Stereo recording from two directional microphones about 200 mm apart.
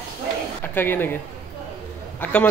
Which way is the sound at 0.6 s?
10° left (ahead or behind).